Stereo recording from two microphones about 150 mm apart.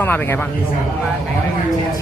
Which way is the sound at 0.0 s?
15° left (ahead or behind).